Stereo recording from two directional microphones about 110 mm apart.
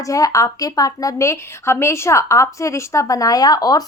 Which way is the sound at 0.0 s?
30° left (ahead or behind).